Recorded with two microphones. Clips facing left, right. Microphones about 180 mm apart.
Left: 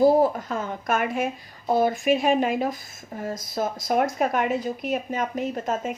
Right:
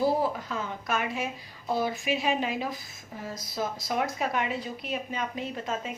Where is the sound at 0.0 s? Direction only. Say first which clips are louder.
Left 8 dB; 50° left (ahead or behind).